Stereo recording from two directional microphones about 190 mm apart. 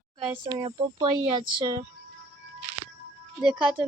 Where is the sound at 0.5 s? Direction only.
25° right (ahead or behind).